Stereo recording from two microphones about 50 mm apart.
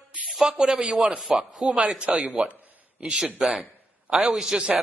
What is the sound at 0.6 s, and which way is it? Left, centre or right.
A man's voice, centre.